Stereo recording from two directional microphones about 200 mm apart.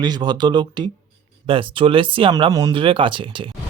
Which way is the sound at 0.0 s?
20° right (ahead or behind).